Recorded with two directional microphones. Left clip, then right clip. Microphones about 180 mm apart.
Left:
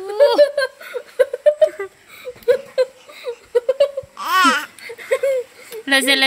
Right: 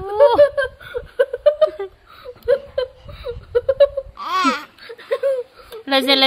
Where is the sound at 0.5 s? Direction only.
60° right (ahead or behind).